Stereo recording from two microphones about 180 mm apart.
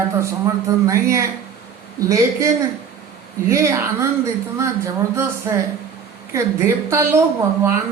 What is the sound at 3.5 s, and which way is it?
A woman's voice, 15° right (ahead or behind).